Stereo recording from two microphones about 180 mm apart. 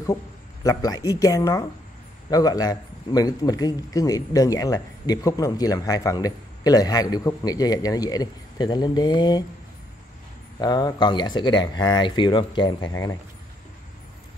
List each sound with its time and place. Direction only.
0.7 s a man's voice: 20° left (ahead or behind)
10.6 s a man's voice: 20° left (ahead or behind)